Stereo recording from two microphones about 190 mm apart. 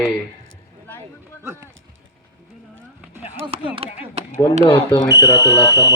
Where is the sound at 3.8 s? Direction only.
30° right (ahead or behind).